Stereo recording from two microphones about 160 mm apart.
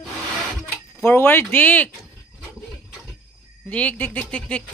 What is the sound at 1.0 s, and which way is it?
Speech, 15° left (ahead or behind).